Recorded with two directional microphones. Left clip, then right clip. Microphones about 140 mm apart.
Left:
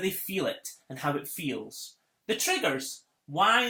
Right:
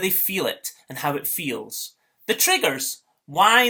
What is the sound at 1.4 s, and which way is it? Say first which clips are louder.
Speech: right 6 dB; 15° right (ahead or behind).